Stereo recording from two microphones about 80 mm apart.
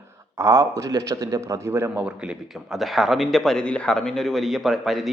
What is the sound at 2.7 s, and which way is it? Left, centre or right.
Speech, centre.